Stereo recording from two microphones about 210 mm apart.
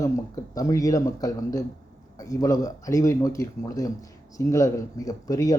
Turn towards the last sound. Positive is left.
turn(degrees=15)  # may be behind; listen again after turning